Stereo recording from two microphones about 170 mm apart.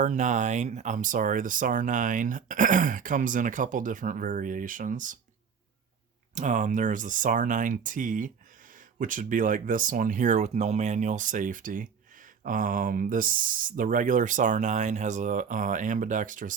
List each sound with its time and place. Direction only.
0.0 s speech: 45° right (ahead or behind)
6.3 s speech: 45° right (ahead or behind)